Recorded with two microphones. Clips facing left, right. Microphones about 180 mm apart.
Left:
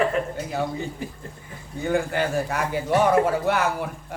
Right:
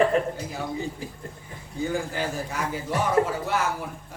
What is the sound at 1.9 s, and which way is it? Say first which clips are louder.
A man's voice: left 8 dB; 65° left (ahead or behind).